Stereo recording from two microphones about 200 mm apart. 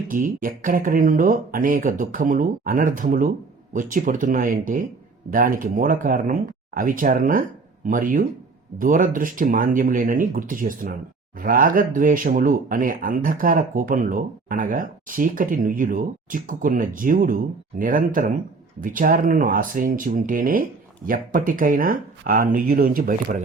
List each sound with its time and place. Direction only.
0.1 s speech: 45° right (ahead or behind)